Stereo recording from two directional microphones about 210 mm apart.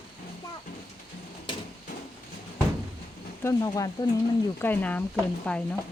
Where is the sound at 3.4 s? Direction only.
15° left (ahead or behind).